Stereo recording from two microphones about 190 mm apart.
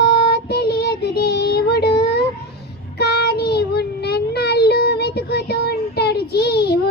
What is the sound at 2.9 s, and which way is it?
Child singing, 60° left (ahead or behind).